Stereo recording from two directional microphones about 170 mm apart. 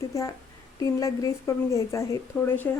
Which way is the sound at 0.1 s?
20° left (ahead or behind).